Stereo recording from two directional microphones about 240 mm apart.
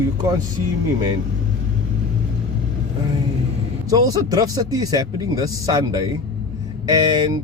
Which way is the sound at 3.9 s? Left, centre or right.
Centre.